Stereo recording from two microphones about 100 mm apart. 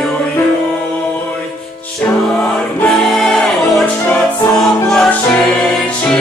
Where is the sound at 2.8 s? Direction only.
5° left (ahead or behind).